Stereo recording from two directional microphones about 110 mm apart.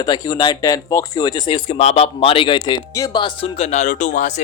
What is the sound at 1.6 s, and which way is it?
Speech, 70° left (ahead or behind).